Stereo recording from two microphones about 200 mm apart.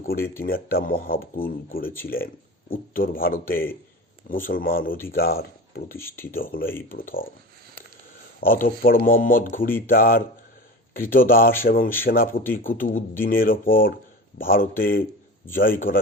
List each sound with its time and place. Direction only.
0.0 s speech: 50° left (ahead or behind)
6.0 s speech: 10° left (ahead or behind)
6.3 s speech: 45° left (ahead or behind)
8.4 s speech: 45° left (ahead or behind)